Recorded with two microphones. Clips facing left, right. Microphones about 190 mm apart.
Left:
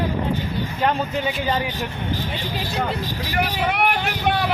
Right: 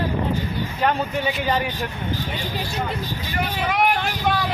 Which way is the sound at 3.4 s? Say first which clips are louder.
Even; 60° left (ahead or behind).